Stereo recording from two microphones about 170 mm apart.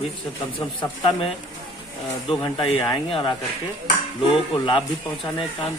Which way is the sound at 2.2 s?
30° left (ahead or behind).